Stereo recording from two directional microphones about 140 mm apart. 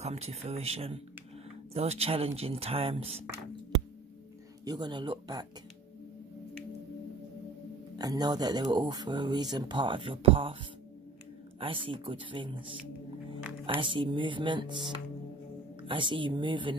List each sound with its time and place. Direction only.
0.0 s speech: 50° right (ahead or behind)
4.6 s speech: 30° right (ahead or behind)
8.0 s speech: 30° right (ahead or behind)
11.6 s speech: 40° right (ahead or behind)
13.7 s speech: 35° right (ahead or behind)